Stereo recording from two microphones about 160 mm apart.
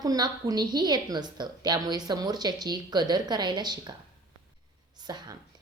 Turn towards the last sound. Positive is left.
turn(degrees=-25)  # may be behind; listen again after turning